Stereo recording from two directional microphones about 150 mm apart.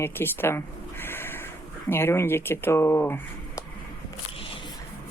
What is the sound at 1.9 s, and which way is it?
Speech, 15° left (ahead or behind).